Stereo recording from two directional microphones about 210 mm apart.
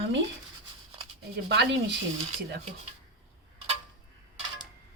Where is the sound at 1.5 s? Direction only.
55° right (ahead or behind).